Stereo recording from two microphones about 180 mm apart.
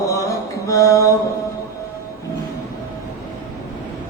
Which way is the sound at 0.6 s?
15° left (ahead or behind).